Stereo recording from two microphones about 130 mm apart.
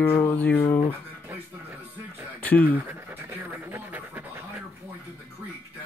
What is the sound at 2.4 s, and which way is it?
Speech, 15° left (ahead or behind).